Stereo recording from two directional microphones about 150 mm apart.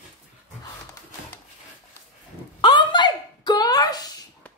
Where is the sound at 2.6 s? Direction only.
30° left (ahead or behind).